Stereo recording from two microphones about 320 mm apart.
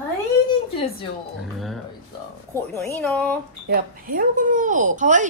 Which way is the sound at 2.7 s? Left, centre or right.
Centre.